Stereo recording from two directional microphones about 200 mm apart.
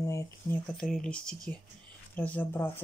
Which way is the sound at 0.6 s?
5° left (ahead or behind).